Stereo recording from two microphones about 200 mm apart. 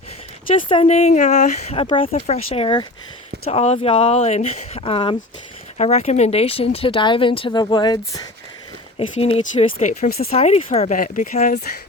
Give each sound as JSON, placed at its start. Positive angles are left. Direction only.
{"t": 0.7, "sound": "speech", "side_deg": 30}
{"t": 10.3, "sound": "speech", "side_deg": 30}